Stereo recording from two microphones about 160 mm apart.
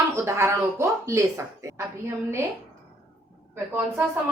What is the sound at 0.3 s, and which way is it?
A woman's voice, 15° right (ahead or behind).